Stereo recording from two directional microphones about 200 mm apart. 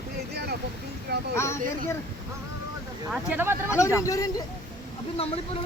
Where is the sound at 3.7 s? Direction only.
15° left (ahead or behind).